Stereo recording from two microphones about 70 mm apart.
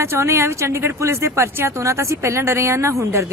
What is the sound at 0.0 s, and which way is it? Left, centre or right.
A woman's voice, right.